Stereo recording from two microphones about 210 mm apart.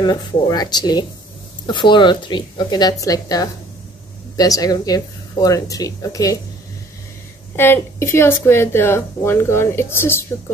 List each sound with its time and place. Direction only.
0.0 s a woman's voice: 20° left (ahead or behind)
7.5 s speech: 10° left (ahead or behind)